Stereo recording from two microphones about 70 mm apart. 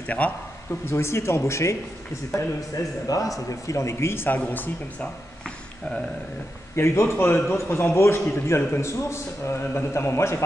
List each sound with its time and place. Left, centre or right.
0.0 s speech: left
0.8 s a man's voice: left
2.3 s a man's voice: left
4.4 s speech: left
6.7 s a man's voice: left